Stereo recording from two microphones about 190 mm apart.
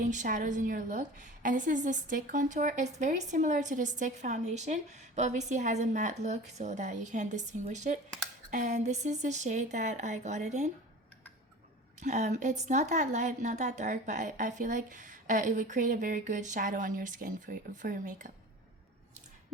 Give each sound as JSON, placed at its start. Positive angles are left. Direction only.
{"t": 0.0, "sound": "a woman's voice", "side_deg": -40}
{"t": 11.9, "sound": "a woman's voice", "side_deg": -40}